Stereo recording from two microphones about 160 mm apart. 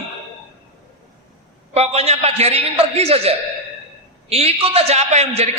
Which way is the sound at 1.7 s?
40° right (ahead or behind).